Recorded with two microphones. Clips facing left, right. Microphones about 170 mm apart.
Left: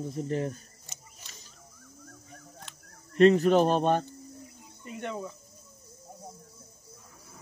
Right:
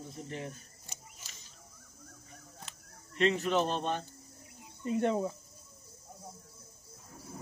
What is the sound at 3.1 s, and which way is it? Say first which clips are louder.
Speech: left 9 dB; 45° left (ahead or behind).